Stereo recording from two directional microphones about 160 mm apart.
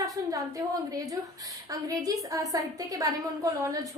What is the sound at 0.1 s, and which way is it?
A woman's voice, 20° right (ahead or behind).